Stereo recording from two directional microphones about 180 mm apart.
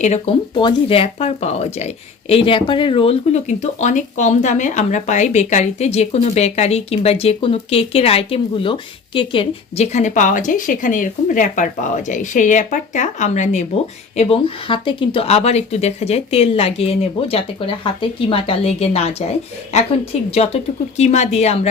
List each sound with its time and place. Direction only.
0.0 s speech: 40° left (ahead or behind)
0.5 s speech: 30° left (ahead or behind)